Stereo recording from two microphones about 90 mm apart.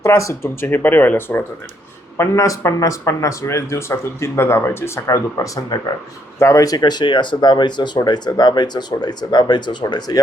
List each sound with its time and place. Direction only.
0.0 s speech: 35° left (ahead or behind)
2.1 s speech: 30° left (ahead or behind); by 10.2 s 50° left (ahead or behind)